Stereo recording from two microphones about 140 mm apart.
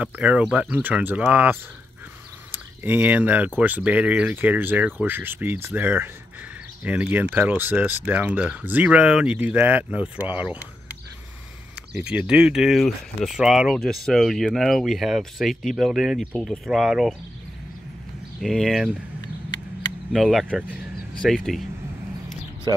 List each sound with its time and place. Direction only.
0.0 s speech: 10° right (ahead or behind)
12.0 s speech: 10° right (ahead or behind)
18.4 s speech: centre (ahead or behind)
20.1 s speech: centre (ahead or behind)
22.7 s speech: 30° right (ahead or behind)